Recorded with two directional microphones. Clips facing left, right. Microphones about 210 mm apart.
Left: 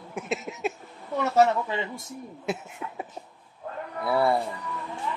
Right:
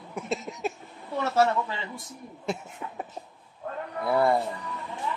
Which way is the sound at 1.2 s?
20° left (ahead or behind).